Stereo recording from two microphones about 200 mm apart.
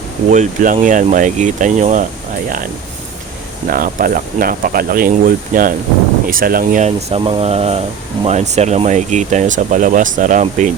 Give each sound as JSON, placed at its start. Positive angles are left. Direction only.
{"t": 0.3, "sound": "speech", "side_deg": -40}
{"t": 3.7, "sound": "speech", "side_deg": -45}